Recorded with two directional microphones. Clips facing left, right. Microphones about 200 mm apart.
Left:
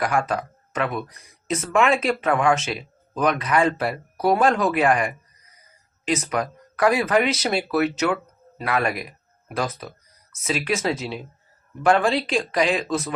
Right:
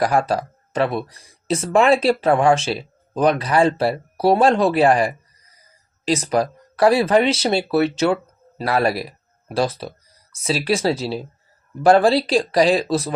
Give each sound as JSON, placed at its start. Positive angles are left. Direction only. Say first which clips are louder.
{"t": 0.0, "sound": "speech", "louder": "right 4 dB", "side_deg": -35}